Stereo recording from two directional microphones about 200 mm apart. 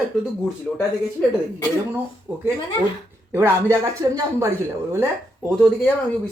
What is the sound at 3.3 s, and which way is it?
Speech, 15° right (ahead or behind).